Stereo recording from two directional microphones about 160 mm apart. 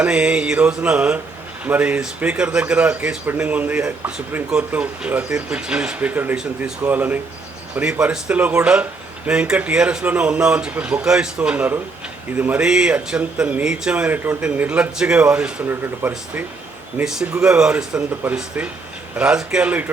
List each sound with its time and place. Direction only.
0.0 s mantra: 5° right (ahead or behind)
1.6 s speech: 10° right (ahead or behind)
17.0 s mantra: 5° right (ahead or behind)
18.2 s speech: 10° right (ahead or behind)
19.1 s mantra: 5° right (ahead or behind)